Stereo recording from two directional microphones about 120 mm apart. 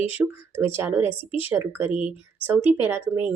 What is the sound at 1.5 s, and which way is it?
Speech, 20° right (ahead or behind).